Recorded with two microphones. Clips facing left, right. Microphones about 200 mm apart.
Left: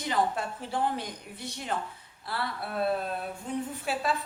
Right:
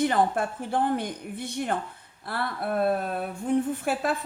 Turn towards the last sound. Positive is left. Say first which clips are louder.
# right 4 dB
turn(degrees=-50)  # may be behind; listen again after turning